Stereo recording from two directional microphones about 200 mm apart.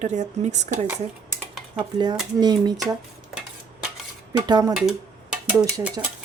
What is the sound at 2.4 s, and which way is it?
Speech, 20° right (ahead or behind).